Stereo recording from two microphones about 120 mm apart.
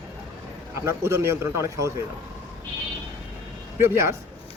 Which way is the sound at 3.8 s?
20° right (ahead or behind).